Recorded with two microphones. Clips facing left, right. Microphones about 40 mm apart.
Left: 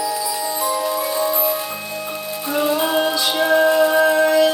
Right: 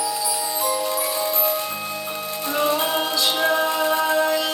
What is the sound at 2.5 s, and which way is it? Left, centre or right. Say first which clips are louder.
Music: left 3 dB; centre.